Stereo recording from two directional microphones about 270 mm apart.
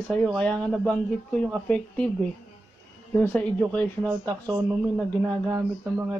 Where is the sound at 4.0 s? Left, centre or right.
Centre.